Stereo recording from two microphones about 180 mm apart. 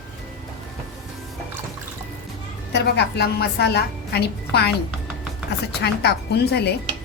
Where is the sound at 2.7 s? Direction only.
70° left (ahead or behind).